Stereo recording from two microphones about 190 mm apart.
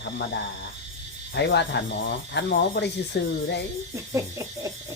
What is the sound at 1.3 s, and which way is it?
Speech, 65° left (ahead or behind).